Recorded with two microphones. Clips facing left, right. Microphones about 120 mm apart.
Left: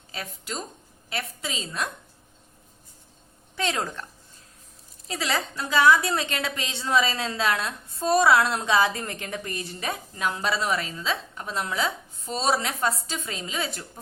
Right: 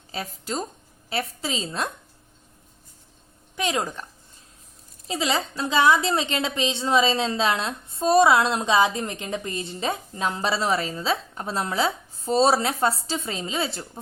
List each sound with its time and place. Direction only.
0.1 s a woman's voice: 35° right (ahead or behind)
3.6 s a woman's voice: 15° right (ahead or behind)
5.0 s a woman's voice: 20° right (ahead or behind)